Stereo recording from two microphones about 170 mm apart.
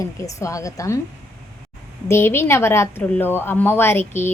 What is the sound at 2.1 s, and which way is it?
A woman's voice, 15° left (ahead or behind).